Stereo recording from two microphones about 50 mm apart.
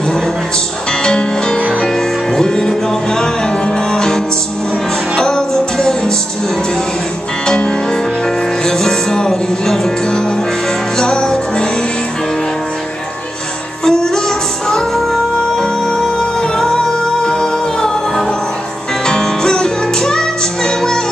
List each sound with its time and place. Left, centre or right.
1.0 s music: centre
7.4 s music: centre
13.8 s music: centre
15.5 s music: centre